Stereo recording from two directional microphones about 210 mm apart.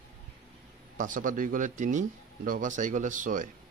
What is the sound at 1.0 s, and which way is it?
Speech, 40° right (ahead or behind).